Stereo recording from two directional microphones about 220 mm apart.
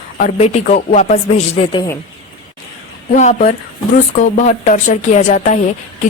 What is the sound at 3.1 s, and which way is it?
Speech, 30° left (ahead or behind).